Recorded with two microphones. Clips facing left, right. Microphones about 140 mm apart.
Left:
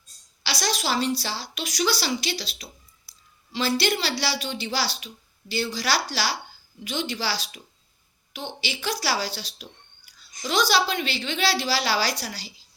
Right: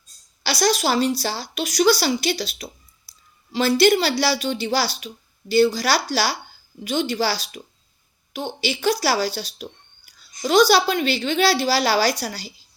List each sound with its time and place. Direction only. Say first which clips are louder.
0.4 s a woman's voice: right 7 dB; 45° right (ahead or behind)